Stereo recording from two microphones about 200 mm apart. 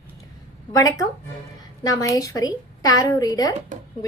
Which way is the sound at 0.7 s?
20° left (ahead or behind).